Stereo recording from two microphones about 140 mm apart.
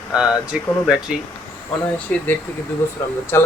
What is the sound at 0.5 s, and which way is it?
Speech, 10° right (ahead or behind).